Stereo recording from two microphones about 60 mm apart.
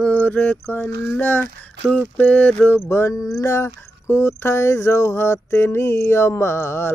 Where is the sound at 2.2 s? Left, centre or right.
Left.